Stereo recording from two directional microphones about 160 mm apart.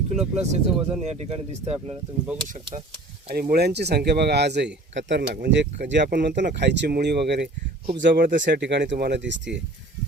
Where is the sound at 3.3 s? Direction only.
75° right (ahead or behind).